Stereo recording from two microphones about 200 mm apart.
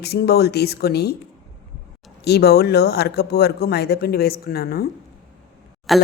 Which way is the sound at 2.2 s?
55° left (ahead or behind).